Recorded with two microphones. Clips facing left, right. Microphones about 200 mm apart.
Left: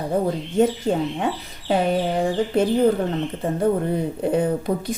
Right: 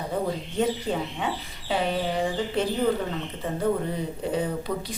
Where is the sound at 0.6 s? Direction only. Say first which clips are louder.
Left 7 dB; 50° left (ahead or behind).